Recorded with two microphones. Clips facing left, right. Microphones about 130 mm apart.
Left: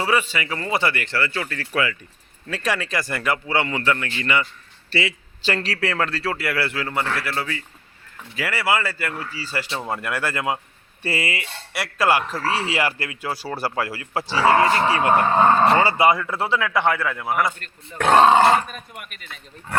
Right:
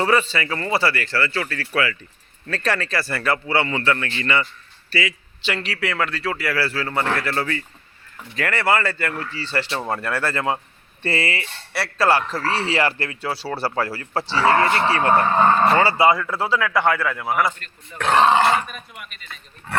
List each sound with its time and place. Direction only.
0.0 s speech: 10° left (ahead or behind)
4.9 s a man's voice: 25° left (ahead or behind)
5.4 s a man's voice: 40° left (ahead or behind); by 6.8 s 20° left (ahead or behind)
7.2 s speech: 10° left (ahead or behind)
17.2 s a man's voice: centre (ahead or behind)
18.2 s a man's voice: 40° left (ahead or behind)